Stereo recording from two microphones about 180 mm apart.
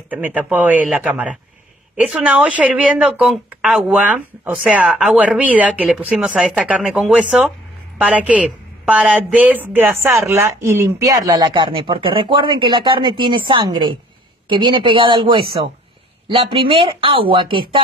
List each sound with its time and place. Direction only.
0.1 s speech: 10° right (ahead or behind); by 17.8 s 25° right (ahead or behind)